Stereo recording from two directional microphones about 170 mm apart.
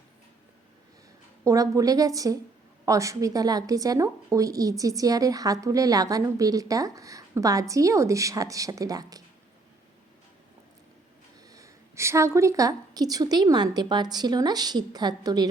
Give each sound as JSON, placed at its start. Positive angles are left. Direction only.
{"t": 1.5, "sound": "a woman's voice", "side_deg": -20}
{"t": 11.5, "sound": "a woman's voice", "side_deg": -15}